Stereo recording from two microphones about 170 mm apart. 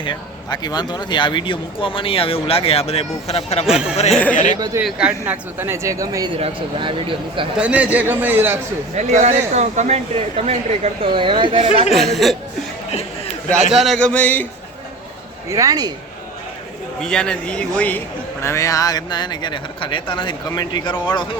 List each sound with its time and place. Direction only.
0.0 s speech: 25° left (ahead or behind)
3.7 s speech: 5° right (ahead or behind)
4.1 s a man's voice: 10° left (ahead or behind)
4.8 s speech: 5° right (ahead or behind)
6.3 s speech: 30° right (ahead or behind)
7.5 s speech: 10° right (ahead or behind)
9.0 s speech: 45° right (ahead or behind)
11.9 s speech: centre (ahead or behind)
12.9 s chatter: 40° left (ahead or behind)
13.7 s a man's voice: centre (ahead or behind)
15.4 s speech: 20° right (ahead or behind)
17.0 s speech: 5° left (ahead or behind); by 20.9 s 25° left (ahead or behind)